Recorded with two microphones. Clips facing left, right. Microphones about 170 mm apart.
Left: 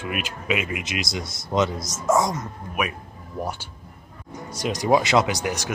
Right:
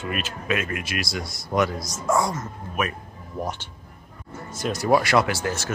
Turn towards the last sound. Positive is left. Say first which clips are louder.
# even
turn(degrees=15)  # may be behind; listen again after turning